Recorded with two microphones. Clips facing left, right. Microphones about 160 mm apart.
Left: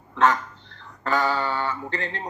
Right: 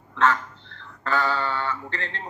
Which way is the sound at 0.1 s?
15° left (ahead or behind).